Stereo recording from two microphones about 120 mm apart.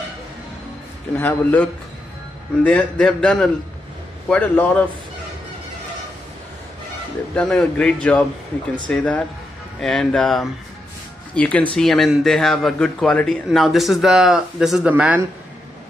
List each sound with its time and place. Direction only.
1.1 s a man's voice: 15° left (ahead or behind)
7.3 s a man's voice: 5° left (ahead or behind); by 15.2 s 10° right (ahead or behind)